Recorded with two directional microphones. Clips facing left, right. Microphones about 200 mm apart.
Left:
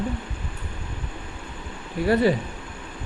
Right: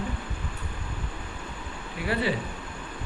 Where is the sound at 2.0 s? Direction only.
40° left (ahead or behind).